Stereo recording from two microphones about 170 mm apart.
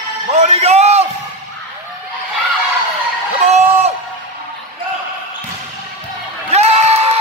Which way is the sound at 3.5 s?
40° right (ahead or behind).